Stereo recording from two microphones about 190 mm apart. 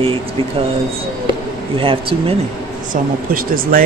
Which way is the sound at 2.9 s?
50° right (ahead or behind).